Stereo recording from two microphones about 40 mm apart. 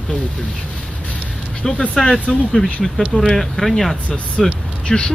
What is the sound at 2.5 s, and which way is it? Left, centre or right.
Speech, centre.